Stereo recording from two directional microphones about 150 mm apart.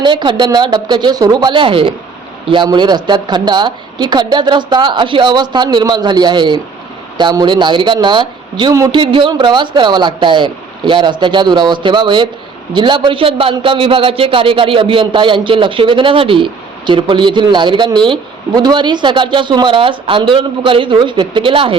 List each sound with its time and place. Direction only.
0.0 s a man's voice: 30° right (ahead or behind)